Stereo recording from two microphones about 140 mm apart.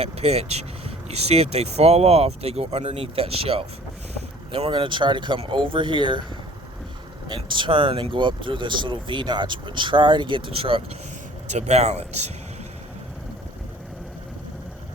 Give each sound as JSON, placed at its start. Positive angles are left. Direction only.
{"t": 0.0, "sound": "speech", "side_deg": -50}
{"t": 7.3, "sound": "speech", "side_deg": -35}
{"t": 11.4, "sound": "speech", "side_deg": -55}